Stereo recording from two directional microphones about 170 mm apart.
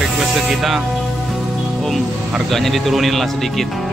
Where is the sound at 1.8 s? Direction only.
Centre (ahead or behind).